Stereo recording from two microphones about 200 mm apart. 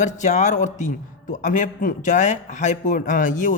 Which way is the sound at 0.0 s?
35° left (ahead or behind).